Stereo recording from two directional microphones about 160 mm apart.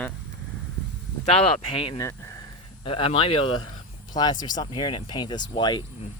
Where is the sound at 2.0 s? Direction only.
20° left (ahead or behind).